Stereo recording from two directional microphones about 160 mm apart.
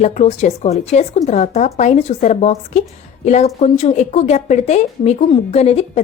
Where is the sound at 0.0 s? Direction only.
45° left (ahead or behind).